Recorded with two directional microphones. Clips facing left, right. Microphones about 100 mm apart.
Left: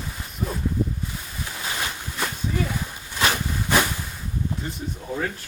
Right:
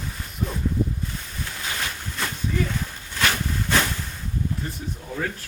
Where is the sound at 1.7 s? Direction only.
15° left (ahead or behind).